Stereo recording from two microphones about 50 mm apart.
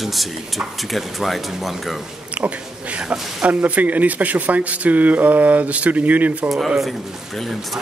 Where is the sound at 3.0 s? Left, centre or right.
Right.